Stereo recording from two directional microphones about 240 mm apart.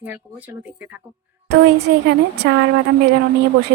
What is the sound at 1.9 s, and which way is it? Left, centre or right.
Speech, right.